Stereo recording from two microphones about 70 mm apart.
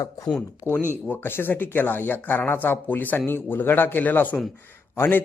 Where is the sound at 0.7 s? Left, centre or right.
Left.